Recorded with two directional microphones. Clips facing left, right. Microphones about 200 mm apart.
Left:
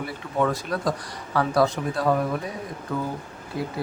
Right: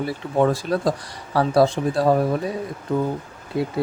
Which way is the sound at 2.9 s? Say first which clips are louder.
Right 6 dB; 20° right (ahead or behind).